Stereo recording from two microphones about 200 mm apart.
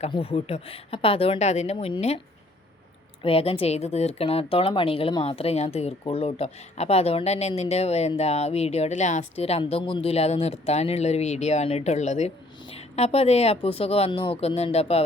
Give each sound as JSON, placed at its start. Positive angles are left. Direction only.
{"t": 0.0, "sound": "speech", "side_deg": 30}
{"t": 3.2, "sound": "speech", "side_deg": 30}